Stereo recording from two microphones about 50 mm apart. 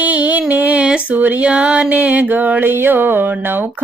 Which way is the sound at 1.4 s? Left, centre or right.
Right.